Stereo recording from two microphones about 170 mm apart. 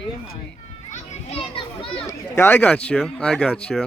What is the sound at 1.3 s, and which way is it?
Children playing, 35° left (ahead or behind).